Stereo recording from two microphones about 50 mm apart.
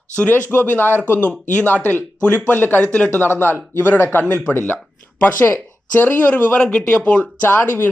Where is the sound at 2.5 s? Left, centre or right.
Left.